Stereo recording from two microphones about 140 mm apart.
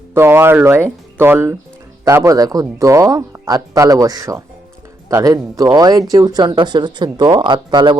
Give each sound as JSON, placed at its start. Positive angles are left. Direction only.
{"t": 0.1, "sound": "speech", "side_deg": -15}